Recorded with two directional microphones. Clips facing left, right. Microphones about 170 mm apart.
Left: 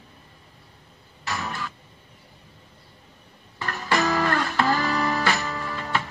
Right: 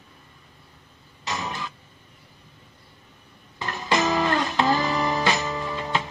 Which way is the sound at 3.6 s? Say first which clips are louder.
Even; 20° right (ahead or behind).